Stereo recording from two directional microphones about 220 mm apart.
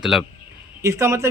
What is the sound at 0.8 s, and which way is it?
Speech, 10° right (ahead or behind).